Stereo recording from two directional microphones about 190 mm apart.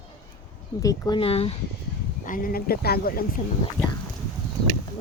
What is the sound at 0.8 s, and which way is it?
Speech, 20° left (ahead or behind).